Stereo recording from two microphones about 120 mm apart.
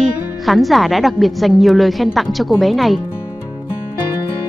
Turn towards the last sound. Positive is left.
turn(degrees=0)  # may be behind; listen again after turning